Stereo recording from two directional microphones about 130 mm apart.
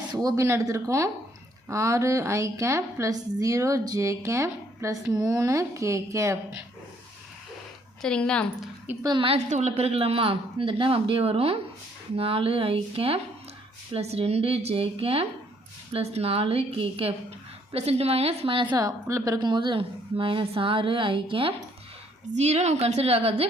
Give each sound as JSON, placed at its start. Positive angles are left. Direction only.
{"t": 0.1, "sound": "a woman's voice", "side_deg": -30}
{"t": 8.0, "sound": "a woman's voice", "side_deg": 10}
{"t": 9.0, "sound": "a woman's voice", "side_deg": -40}
{"t": 9.5, "sound": "a woman's voice", "side_deg": -60}
{"t": 19.4, "sound": "a woman's voice", "side_deg": -35}
{"t": 22.4, "sound": "a woman's voice", "side_deg": -60}